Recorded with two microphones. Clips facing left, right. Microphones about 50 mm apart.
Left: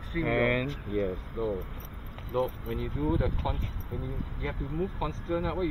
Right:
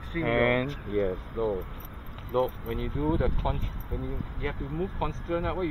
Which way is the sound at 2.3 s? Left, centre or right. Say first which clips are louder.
Right 3 dB; right.